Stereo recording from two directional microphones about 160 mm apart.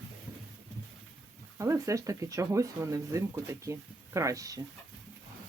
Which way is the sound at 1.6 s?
20° right (ahead or behind).